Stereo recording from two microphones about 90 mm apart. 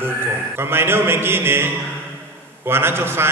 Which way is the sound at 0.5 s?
25° right (ahead or behind).